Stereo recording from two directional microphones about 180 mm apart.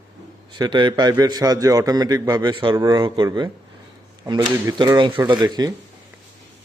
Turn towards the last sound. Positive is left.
turn(degrees=-20)  # may be behind; listen again after turning